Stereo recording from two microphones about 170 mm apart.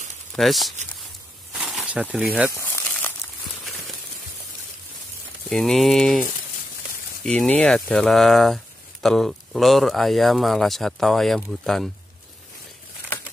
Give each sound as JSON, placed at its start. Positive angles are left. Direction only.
{"t": 0.4, "sound": "speech", "side_deg": 0}
{"t": 1.5, "sound": "a sound", "side_deg": 0}
{"t": 2.5, "sound": "crumpling", "side_deg": 15}
{"t": 5.5, "sound": "speech", "side_deg": 0}
{"t": 7.2, "sound": "speech", "side_deg": 5}